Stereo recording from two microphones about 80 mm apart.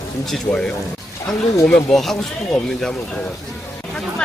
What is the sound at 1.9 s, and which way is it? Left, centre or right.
Speech, centre.